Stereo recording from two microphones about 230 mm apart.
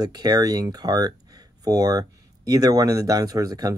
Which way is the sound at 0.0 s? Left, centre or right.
Centre.